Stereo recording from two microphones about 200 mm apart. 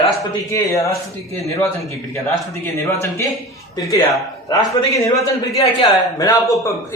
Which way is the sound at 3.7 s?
20° left (ahead or behind).